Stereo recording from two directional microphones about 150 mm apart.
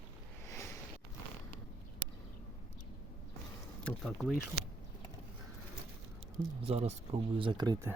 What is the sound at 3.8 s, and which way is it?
Speech, 5° left (ahead or behind).